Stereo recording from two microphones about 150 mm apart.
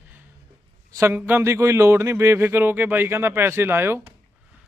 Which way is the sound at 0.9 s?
15° right (ahead or behind).